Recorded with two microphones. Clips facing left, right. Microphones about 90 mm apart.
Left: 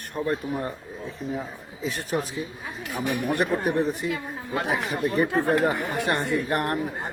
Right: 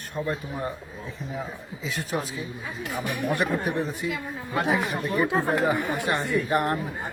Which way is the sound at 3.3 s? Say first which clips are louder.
Left 4 dB; 50° left (ahead or behind).